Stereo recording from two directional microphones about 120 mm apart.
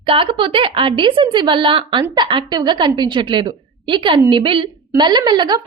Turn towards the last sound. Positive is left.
turn(degrees=-40)  # may be behind; listen again after turning